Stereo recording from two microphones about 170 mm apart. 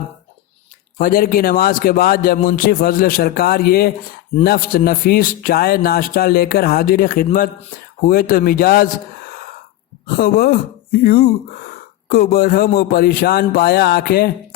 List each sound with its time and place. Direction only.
0.9 s a man's voice: 55° left (ahead or behind)
10.1 s a man's voice: 65° left (ahead or behind)